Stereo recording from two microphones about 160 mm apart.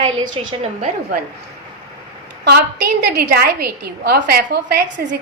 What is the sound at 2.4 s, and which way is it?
A woman's voice, 90° right.